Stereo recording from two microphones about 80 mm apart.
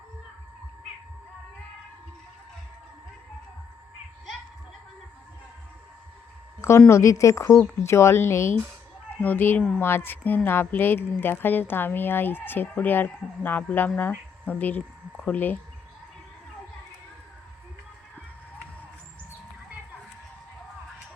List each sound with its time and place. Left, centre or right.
6.6 s a woman's voice: left; by 15.5 s centre